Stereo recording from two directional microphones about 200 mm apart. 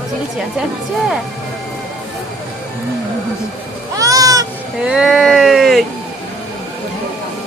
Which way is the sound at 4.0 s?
15° right (ahead or behind).